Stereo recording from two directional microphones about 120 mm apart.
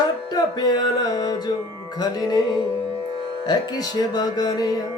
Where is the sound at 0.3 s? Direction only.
35° left (ahead or behind).